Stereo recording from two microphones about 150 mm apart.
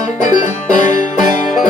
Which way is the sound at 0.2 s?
55° left (ahead or behind).